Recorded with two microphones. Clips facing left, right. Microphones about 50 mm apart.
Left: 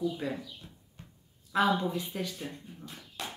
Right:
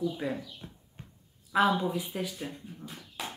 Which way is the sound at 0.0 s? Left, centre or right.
Centre.